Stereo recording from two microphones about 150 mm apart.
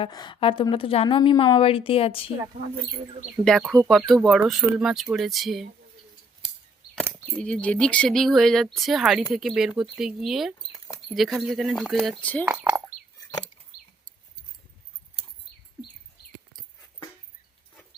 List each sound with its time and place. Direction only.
0.0 s a woman's voice: 30° left (ahead or behind)
3.4 s speech: centre (ahead or behind)
7.3 s speech: 5° left (ahead or behind)
10.7 s mouse: 25° left (ahead or behind)
11.1 s speech: centre (ahead or behind)
13.7 s a sound: 80° left